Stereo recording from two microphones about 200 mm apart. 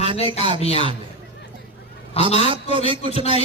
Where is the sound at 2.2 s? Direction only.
30° left (ahead or behind).